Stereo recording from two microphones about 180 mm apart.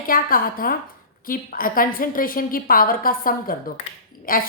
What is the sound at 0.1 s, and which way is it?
A woman's voice, 50° left (ahead or behind).